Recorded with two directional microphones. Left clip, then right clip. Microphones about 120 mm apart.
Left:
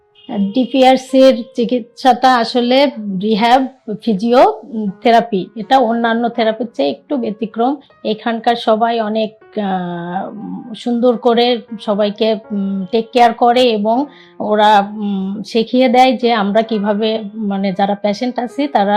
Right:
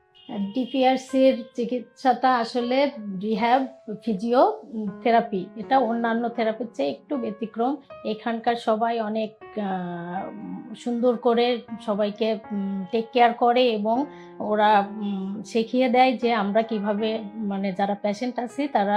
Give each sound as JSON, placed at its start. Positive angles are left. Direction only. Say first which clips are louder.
{"t": 0.3, "sound": "a woman's voice", "louder": "left 12 dB", "side_deg": 25}